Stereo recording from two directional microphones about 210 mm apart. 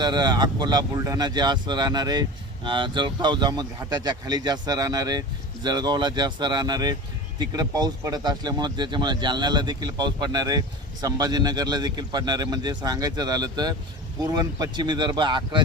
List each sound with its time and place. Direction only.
0.0 s speech: 20° right (ahead or behind)